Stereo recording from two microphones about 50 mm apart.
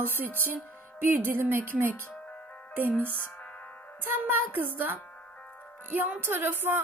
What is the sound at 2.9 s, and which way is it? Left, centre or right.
Speech, left.